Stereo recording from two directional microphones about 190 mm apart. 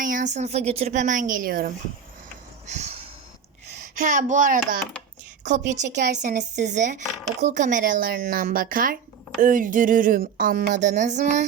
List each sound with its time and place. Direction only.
0.0 s a woman's voice: 45° right (ahead or behind)
2.6 s snort: 35° right (ahead or behind)
3.9 s a woman's voice: 45° right (ahead or behind)